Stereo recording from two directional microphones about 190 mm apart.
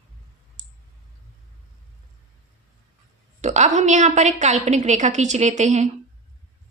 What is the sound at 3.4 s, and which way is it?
A woman's voice, 40° right (ahead or behind).